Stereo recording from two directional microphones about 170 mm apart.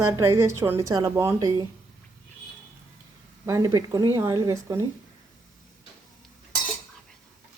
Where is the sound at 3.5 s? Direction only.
20° right (ahead or behind).